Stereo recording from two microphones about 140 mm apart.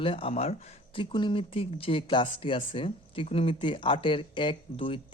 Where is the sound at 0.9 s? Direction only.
35° left (ahead or behind).